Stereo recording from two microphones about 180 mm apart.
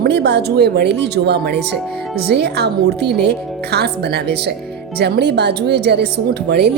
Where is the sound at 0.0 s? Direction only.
65° right (ahead or behind).